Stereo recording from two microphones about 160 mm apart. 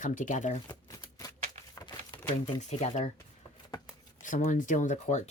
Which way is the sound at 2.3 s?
45° left (ahead or behind).